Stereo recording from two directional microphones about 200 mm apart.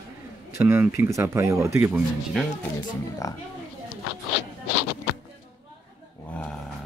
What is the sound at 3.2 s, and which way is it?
Speech, 15° left (ahead or behind).